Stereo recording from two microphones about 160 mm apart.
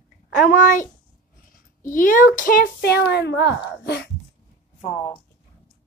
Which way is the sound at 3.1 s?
90° left.